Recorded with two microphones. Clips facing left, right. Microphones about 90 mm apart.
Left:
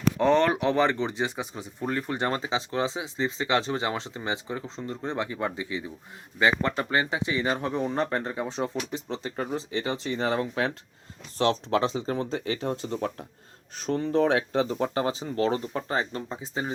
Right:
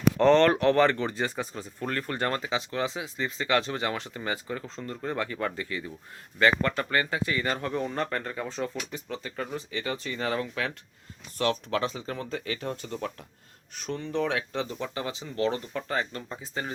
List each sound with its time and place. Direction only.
0.2 s speech: 15° left (ahead or behind)